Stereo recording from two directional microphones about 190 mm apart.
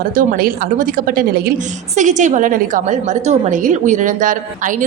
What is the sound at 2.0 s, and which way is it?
A woman's voice, 40° right (ahead or behind).